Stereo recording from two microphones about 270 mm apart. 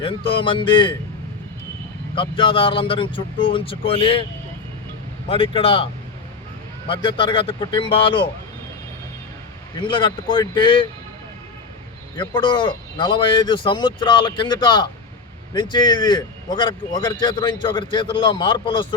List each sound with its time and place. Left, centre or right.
0.0 s speech: centre
2.3 s speech: centre
5.3 s a man's voice: centre
9.8 s a man's voice: centre
12.1 s a man's voice: centre